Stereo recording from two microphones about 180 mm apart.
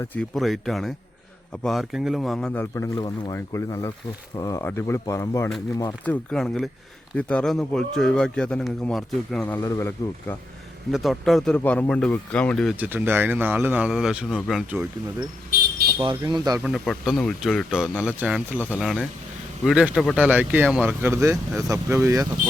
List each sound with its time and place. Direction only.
0.0 s a man's voice: 10° left (ahead or behind)
6.3 s a man's voice: centre (ahead or behind)
10.9 s a man's voice: centre (ahead or behind)
12.8 s speech: 10° right (ahead or behind)
16.0 s speech: 25° right (ahead or behind)
16.6 s a man's voice: 5° right (ahead or behind)